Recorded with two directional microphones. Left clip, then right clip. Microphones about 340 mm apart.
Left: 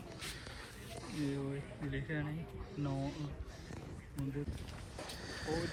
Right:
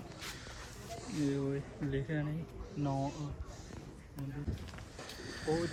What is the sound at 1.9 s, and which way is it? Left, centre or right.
Speech, right.